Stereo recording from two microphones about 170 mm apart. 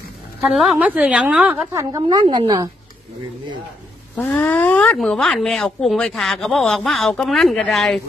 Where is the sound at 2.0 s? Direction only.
30° right (ahead or behind).